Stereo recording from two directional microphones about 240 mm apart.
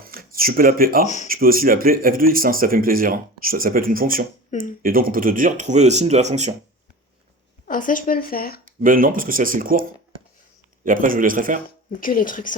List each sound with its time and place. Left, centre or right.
0.0 s speech: right
1.0 s speech: left
1.3 s speech: right
7.7 s speech: left
8.6 s speech: right
10.8 s speech: right
11.9 s speech: left